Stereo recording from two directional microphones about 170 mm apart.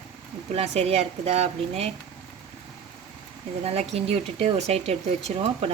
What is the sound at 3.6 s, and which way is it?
Speech, 40° right (ahead or behind).